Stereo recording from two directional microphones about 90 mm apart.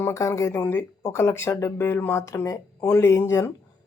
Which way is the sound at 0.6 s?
20° left (ahead or behind).